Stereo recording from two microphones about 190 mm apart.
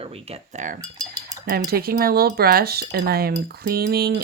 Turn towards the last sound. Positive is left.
turn(degrees=-55)  # may be behind; listen again after turning